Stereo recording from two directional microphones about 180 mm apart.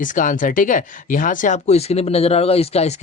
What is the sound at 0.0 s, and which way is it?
Speech, 45° left (ahead or behind).